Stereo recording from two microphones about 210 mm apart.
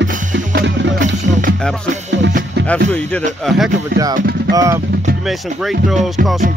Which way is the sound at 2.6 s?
5° left (ahead or behind).